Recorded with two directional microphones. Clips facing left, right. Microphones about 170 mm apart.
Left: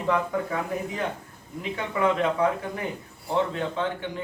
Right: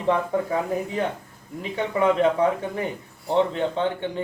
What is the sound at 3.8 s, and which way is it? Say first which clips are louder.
Speech: right 4 dB; 30° right (ahead or behind).